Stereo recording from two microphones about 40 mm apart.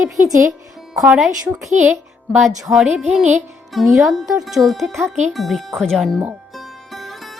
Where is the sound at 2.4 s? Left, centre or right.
Centre.